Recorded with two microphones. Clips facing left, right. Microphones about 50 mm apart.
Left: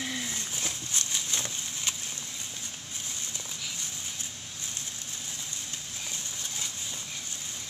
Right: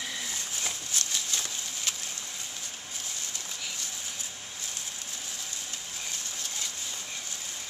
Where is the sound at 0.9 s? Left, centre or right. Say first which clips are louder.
Even; left.